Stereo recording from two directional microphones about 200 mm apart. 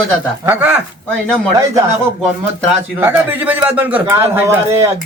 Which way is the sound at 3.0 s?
10° right (ahead or behind).